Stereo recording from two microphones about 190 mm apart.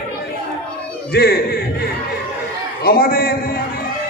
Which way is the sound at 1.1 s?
55° left (ahead or behind).